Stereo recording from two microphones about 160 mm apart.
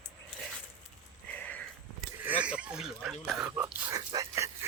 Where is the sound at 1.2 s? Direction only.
10° left (ahead or behind).